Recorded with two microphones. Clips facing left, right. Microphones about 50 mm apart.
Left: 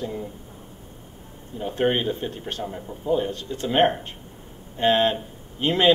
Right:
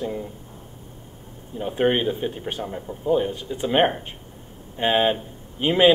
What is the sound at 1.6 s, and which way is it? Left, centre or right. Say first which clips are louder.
Speech: right 2 dB; centre.